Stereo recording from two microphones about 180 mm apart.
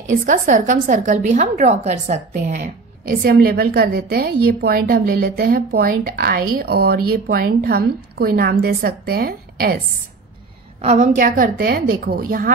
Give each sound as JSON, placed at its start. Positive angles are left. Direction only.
{"t": 0.1, "sound": "a woman's voice", "side_deg": -45}
{"t": 10.8, "sound": "a woman's voice", "side_deg": -40}